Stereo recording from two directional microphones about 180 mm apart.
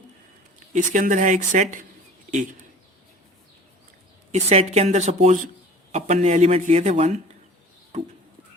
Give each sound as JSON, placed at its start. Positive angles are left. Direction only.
{"t": 0.7, "sound": "speech", "side_deg": -45}
{"t": 4.3, "sound": "speech", "side_deg": -35}